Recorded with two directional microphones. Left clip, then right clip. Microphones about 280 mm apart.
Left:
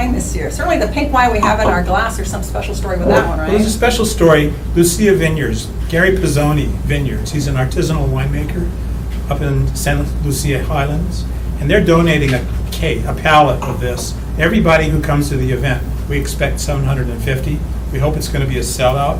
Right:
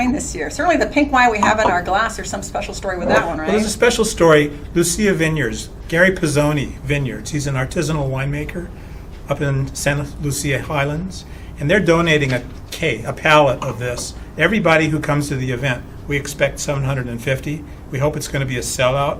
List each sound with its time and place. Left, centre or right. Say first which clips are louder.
0.0 s a woman's voice: left 1 dB; right
3.8 s speech: left 1 dB; right
9.4 s speech: even; right